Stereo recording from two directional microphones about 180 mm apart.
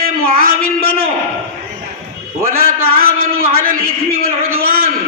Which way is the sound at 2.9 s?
55° right (ahead or behind).